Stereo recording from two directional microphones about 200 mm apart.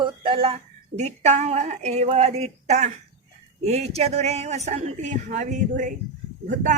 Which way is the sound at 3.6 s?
30° right (ahead or behind).